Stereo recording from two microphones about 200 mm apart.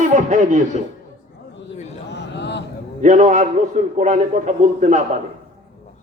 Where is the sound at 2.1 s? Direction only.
60° left (ahead or behind).